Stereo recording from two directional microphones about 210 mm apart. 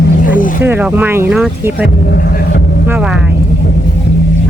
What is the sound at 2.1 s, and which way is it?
Vehicle, 50° left (ahead or behind).